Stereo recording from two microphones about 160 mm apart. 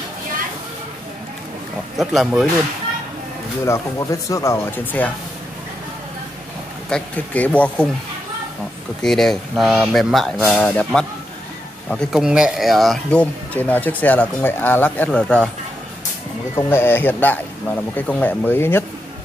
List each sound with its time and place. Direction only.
2.0 s speech: centre (ahead or behind)
3.6 s speech: 20° left (ahead or behind)
6.9 s speech: 10° left (ahead or behind)
9.0 s speech: centre (ahead or behind)
16.5 s speech: 15° left (ahead or behind)